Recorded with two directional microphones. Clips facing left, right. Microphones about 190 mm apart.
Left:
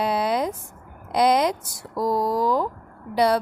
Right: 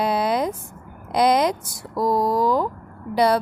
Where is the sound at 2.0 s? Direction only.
90° right.